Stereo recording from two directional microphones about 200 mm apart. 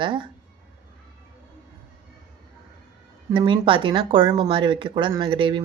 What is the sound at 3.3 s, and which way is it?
Speech, 25° right (ahead or behind).